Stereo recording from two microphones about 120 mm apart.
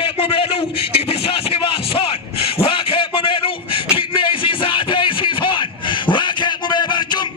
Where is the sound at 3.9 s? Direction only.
45° left (ahead or behind).